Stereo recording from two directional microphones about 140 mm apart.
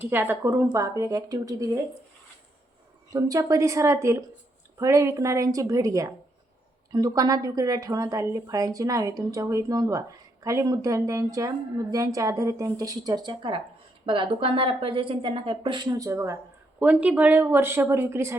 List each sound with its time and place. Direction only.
0.0 s a woman's voice: 15° right (ahead or behind)
3.1 s a woman's voice: 25° right (ahead or behind)
16.8 s speech: 10° right (ahead or behind)